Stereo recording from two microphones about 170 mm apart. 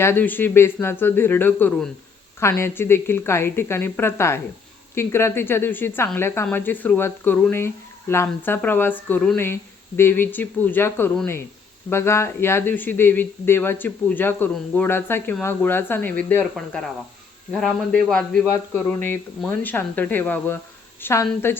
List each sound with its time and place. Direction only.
0.0 s speech: 10° left (ahead or behind)
18.5 s a woman's voice: 15° left (ahead or behind)